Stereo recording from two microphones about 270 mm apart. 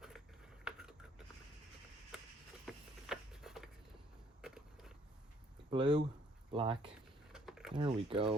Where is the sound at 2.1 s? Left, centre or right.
Centre.